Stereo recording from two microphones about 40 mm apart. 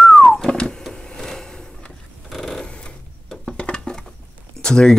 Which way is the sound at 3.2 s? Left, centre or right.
Centre.